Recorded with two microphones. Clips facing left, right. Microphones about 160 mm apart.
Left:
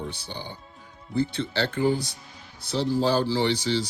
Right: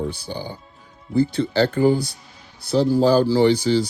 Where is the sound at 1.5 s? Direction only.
45° right (ahead or behind).